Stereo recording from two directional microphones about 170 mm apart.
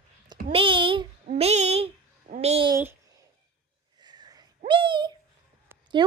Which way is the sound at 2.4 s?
35° right (ahead or behind).